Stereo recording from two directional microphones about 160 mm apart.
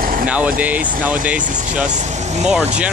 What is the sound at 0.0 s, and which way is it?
Vehicle, 60° right (ahead or behind).